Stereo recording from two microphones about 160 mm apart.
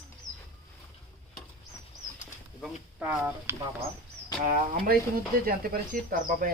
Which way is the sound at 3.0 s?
15° right (ahead or behind).